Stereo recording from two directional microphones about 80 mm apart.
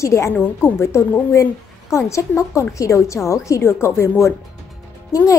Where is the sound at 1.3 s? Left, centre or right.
Left.